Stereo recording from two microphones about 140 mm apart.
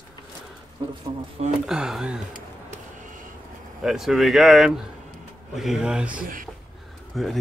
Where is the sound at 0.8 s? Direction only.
30° right (ahead or behind).